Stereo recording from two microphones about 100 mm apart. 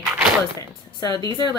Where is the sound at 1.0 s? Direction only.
40° left (ahead or behind).